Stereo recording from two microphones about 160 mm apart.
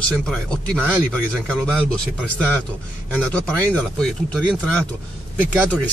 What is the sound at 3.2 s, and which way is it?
Speech, 5° left (ahead or behind).